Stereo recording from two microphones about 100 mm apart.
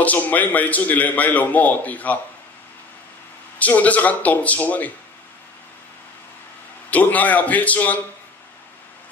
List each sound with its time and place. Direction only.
0.0 s a man's voice: 15° left (ahead or behind)
3.5 s a man's voice: 15° left (ahead or behind)
6.9 s a man's voice: 15° left (ahead or behind)